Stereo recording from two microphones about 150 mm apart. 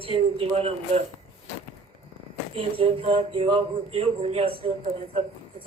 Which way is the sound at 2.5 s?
40° right (ahead or behind).